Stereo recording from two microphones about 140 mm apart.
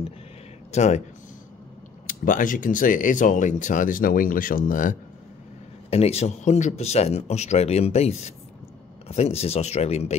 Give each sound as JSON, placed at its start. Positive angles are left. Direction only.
{"t": 0.7, "sound": "speech", "side_deg": 55}
{"t": 2.0, "sound": "speech", "side_deg": 75}
{"t": 5.9, "sound": "speech", "side_deg": 45}